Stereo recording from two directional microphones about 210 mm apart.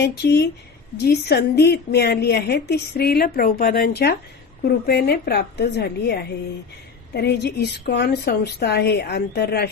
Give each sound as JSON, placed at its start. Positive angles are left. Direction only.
{"t": 0.0, "sound": "a woman's voice", "side_deg": 50}